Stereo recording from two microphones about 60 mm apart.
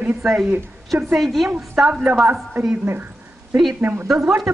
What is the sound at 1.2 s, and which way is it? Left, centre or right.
Speech, centre.